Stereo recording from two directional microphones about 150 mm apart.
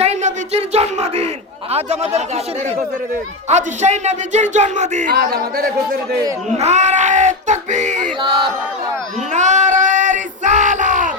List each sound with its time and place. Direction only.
0.0 s a sound: 50° right (ahead or behind)
1.7 s a man's voice: 45° right (ahead or behind)
3.5 s a man's voice: 50° right (ahead or behind)
5.1 s a man's voice: 90° right
6.6 s a man's voice: 50° right (ahead or behind)
9.3 s a sound: 55° right (ahead or behind)